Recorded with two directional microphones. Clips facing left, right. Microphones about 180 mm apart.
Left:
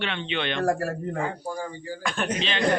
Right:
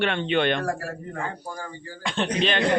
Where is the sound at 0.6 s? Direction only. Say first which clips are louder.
Left 4 dB; 40° left (ahead or behind).